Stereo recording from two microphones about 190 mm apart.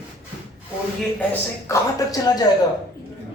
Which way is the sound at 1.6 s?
20° left (ahead or behind).